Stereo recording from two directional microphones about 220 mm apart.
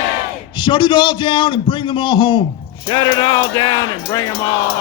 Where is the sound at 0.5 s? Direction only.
20° left (ahead or behind).